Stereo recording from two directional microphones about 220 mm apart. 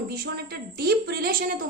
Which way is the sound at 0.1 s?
45° right (ahead or behind).